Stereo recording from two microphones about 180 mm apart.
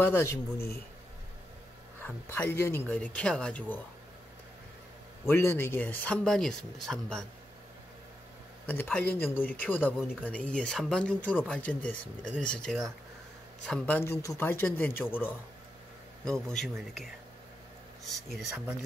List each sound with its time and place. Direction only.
0.0 s speech: 15° left (ahead or behind)
2.0 s speech: 10° left (ahead or behind)
5.2 s speech: 15° left (ahead or behind)
8.6 s speech: 10° left (ahead or behind)